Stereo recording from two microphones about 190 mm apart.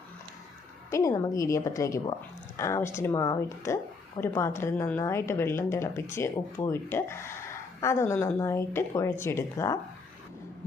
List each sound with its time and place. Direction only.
0.9 s a woman's voice: 15° left (ahead or behind)